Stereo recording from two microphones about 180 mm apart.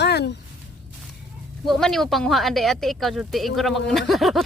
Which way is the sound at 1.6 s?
Centre (ahead or behind).